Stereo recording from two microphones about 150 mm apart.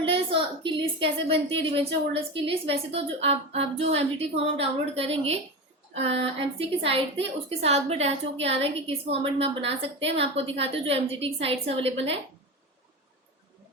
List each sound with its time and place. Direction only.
0.0 s a woman's voice: 35° right (ahead or behind)